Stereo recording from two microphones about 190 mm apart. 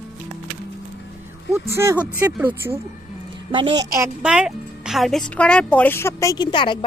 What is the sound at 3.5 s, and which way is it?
Speech, 25° right (ahead or behind).